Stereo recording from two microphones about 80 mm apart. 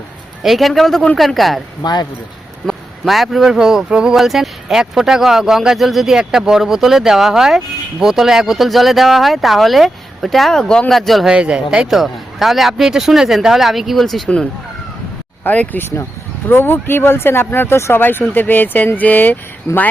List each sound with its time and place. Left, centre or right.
0.4 s speech: centre
1.8 s speech: left
2.6 s speech: centre
11.3 s speech: centre
15.4 s speech: left